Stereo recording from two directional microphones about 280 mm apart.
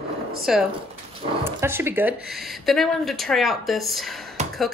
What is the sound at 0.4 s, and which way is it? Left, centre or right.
Speech, centre.